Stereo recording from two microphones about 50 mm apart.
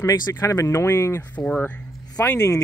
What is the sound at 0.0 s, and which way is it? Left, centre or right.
Speech, left.